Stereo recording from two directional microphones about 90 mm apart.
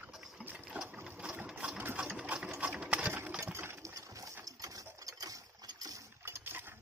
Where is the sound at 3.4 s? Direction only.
30° right (ahead or behind).